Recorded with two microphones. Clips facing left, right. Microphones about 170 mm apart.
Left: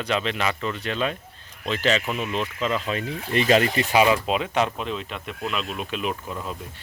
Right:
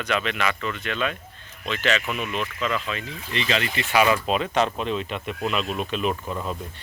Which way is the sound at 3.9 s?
15° left (ahead or behind).